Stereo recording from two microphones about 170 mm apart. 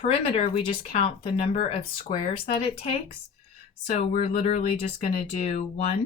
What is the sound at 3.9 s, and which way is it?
Speech, 45° left (ahead or behind).